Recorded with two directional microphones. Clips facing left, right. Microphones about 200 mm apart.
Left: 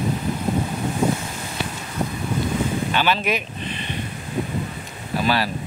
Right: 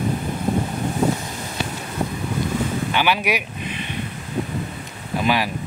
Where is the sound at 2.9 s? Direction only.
10° right (ahead or behind).